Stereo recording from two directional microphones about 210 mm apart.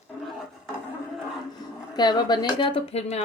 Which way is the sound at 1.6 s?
20° left (ahead or behind).